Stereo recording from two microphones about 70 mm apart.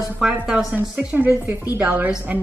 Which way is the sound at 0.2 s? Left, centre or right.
Centre.